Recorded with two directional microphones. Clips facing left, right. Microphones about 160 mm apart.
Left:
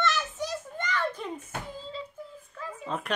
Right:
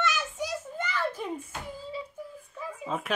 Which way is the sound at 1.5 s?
60° left (ahead or behind).